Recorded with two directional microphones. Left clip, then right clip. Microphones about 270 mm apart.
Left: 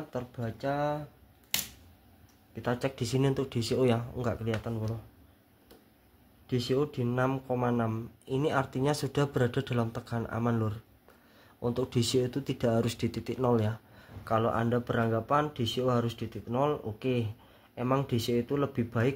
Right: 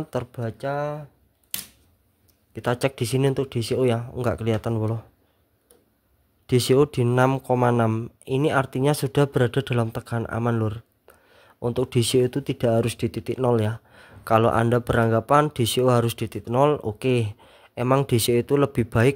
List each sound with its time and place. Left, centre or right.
0.1 s speech: right
2.5 s speech: right
6.4 s speech: right